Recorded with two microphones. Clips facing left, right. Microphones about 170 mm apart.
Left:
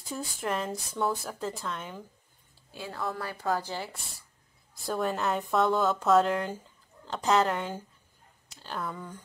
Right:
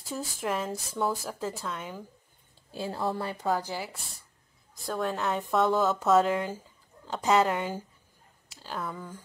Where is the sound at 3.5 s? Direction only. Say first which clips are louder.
Right 1 dB; 10° right (ahead or behind).